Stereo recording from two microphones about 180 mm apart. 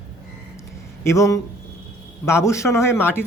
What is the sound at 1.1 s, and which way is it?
A man's voice, 15° left (ahead or behind).